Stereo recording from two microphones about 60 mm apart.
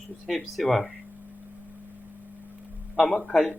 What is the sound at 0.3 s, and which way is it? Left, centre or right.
Speech, centre.